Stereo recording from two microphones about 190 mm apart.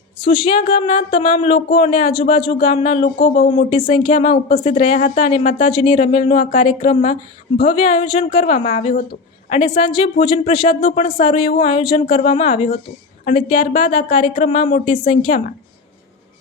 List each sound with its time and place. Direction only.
0.3 s speech: 25° left (ahead or behind)
3.2 s speech: 55° left (ahead or behind)
3.5 s speech: 30° left (ahead or behind)
4.4 s speech: 40° left (ahead or behind)
9.5 s speech: 25° left (ahead or behind)